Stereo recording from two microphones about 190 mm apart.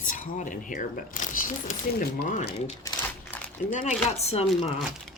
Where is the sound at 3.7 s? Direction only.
40° left (ahead or behind).